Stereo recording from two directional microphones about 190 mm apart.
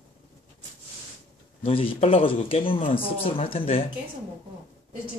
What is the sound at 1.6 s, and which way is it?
Speech, 30° left (ahead or behind).